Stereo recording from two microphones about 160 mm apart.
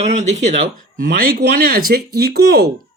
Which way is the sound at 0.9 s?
70° right (ahead or behind).